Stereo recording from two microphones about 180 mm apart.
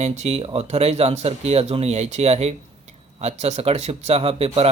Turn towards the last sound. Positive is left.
turn(degrees=-35)  # may be behind; listen again after turning